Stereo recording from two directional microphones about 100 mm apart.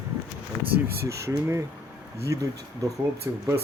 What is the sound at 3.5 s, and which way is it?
Speech, 30° right (ahead or behind).